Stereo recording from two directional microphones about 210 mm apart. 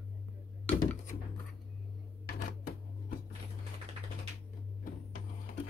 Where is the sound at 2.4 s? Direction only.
40° left (ahead or behind).